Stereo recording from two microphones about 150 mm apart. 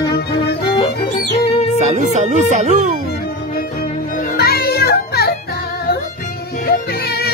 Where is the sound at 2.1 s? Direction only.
50° right (ahead or behind).